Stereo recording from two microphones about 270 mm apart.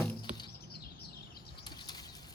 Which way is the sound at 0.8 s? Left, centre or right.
Left.